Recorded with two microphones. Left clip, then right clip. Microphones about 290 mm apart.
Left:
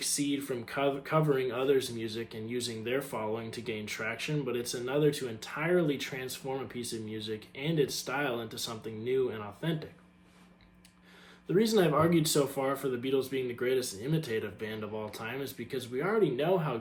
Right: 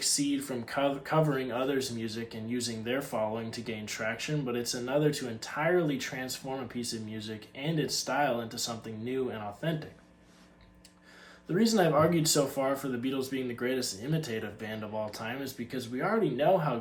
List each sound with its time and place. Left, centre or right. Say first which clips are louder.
0.2 s speech: right 1 dB; centre
11.5 s speech: right 1 dB; centre